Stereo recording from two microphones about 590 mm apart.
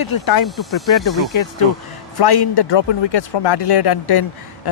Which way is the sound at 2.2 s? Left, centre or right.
Left.